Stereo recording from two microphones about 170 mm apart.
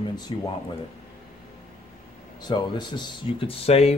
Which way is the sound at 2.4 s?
25° left (ahead or behind).